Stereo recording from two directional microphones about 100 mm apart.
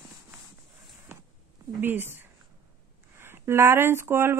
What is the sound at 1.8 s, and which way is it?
Speech, 20° right (ahead or behind).